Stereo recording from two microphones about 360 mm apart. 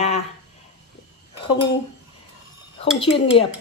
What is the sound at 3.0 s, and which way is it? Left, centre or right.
Speech, centre.